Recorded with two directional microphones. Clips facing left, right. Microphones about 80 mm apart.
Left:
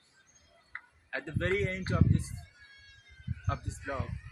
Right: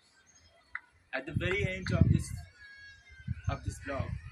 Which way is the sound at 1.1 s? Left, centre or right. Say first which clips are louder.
Left 2 dB; left.